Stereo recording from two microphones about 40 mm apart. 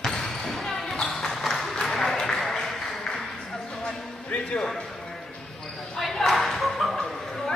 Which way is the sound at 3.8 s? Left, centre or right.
Left.